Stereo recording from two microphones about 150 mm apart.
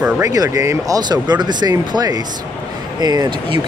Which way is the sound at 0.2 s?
25° right (ahead or behind).